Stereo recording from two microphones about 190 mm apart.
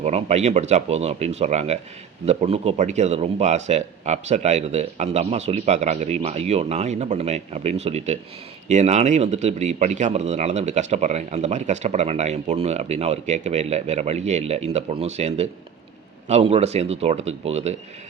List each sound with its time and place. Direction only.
0.0 s speech: 35° right (ahead or behind)